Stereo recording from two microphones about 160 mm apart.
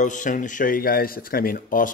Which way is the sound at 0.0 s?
55° left (ahead or behind).